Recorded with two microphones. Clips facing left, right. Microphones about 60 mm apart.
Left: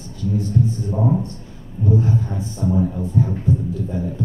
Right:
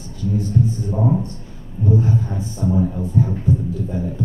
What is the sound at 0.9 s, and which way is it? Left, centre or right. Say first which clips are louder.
Speech: even; centre.